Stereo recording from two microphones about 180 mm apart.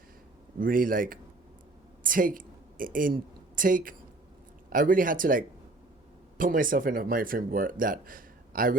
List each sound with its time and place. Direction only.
0.6 s a woman's voice: 50° right (ahead or behind)